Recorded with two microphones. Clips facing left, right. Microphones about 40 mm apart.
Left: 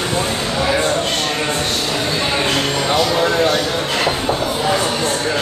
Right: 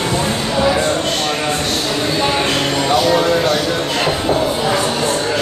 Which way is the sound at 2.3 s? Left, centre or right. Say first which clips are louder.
Right 1 dB; centre.